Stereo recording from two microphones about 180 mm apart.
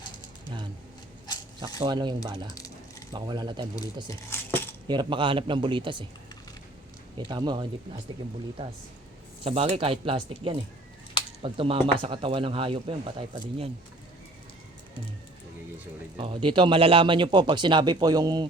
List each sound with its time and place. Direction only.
1.8 s speech: 25° right (ahead or behind)
4.3 s cutlery: 10° left (ahead or behind)
4.9 s speech: 25° right (ahead or behind)
7.2 s speech: 25° right (ahead or behind)
9.4 s speech: 35° right (ahead or behind)
16.1 s speech: 30° right (ahead or behind)